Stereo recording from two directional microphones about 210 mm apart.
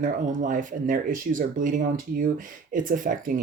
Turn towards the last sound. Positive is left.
turn(degrees=-40)  # may be behind; listen again after turning